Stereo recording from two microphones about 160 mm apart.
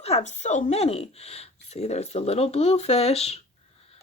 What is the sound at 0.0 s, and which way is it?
Speech, 45° left (ahead or behind).